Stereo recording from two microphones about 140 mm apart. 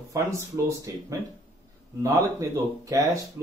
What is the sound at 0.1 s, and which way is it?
Speech, 20° right (ahead or behind).